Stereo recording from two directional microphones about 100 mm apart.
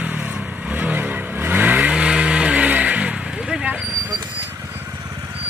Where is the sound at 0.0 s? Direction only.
15° right (ahead or behind).